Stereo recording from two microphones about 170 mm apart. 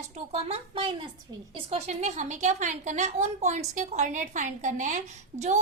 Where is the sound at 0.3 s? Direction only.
35° right (ahead or behind).